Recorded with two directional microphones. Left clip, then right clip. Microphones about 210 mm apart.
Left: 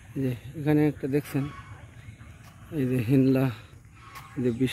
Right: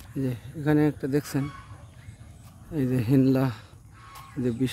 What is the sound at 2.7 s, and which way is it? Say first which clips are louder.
Speech: right 1 dB; 15° right (ahead or behind).